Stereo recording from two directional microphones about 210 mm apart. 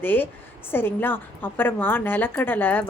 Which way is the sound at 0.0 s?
10° left (ahead or behind).